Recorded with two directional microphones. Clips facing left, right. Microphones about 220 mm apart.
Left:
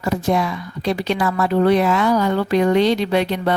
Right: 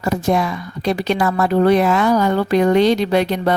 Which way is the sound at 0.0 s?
45° right (ahead or behind).